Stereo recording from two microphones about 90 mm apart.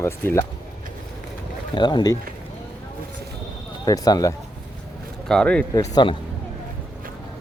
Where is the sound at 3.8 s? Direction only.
45° left (ahead or behind).